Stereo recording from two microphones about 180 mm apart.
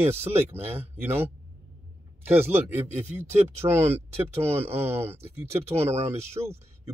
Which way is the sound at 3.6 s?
15° right (ahead or behind).